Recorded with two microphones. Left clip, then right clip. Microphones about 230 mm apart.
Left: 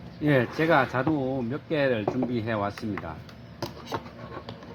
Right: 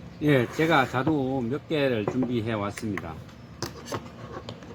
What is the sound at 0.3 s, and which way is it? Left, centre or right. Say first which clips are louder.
Speech: even; centre.